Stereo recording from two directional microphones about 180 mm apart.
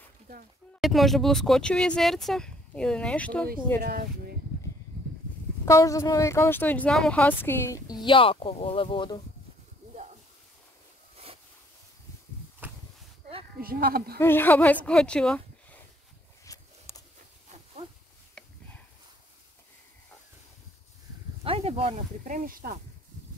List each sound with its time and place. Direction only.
0.7 s speech: centre (ahead or behind)
3.8 s speech: 55° right (ahead or behind)
5.7 s speech: 15° left (ahead or behind)
12.6 s a sound: 10° right (ahead or behind)
13.6 s speech: 55° right (ahead or behind)
14.1 s speech: 10° left (ahead or behind)
16.4 s a sound: 20° left (ahead or behind)
18.4 s a sound: 5° left (ahead or behind)
21.5 s speech: 35° right (ahead or behind)
22.3 s speech: 50° right (ahead or behind)